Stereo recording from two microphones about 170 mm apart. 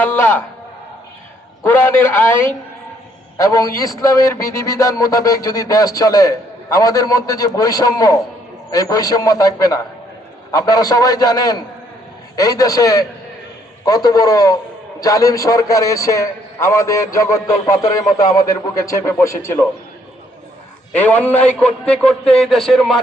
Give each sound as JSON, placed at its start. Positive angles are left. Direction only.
{"t": 0.0, "sound": "a man's voice", "side_deg": 10}
{"t": 1.6, "sound": "a man's voice", "side_deg": 15}
{"t": 20.9, "sound": "a man's voice", "side_deg": 10}